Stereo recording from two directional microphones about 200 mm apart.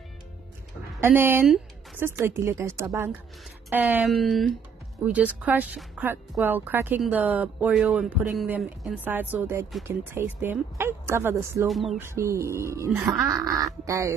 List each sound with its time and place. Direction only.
1.0 s speech: 10° right (ahead or behind)
11.6 s speech: centre (ahead or behind)
12.0 s speech: 15° right (ahead or behind)